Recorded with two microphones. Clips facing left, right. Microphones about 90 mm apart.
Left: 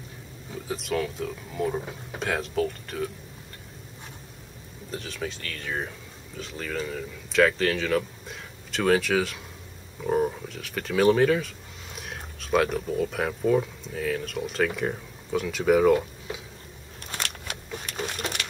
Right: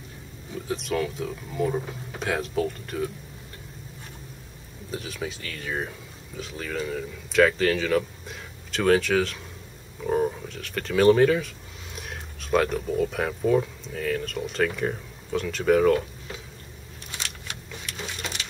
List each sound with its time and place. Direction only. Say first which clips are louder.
0.7 s speech: right 1 dB; centre (ahead or behind)
4.9 s speech: right 1 dB; 5° right (ahead or behind); by 16.3 s 10° left (ahead or behind)
17.1 s a sound: left 3 dB; 50° left (ahead or behind)